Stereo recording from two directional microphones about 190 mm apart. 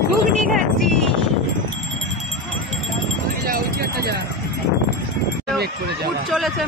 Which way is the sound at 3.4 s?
50° right (ahead or behind).